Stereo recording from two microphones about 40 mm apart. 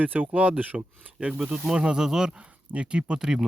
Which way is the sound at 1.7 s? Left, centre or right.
Centre.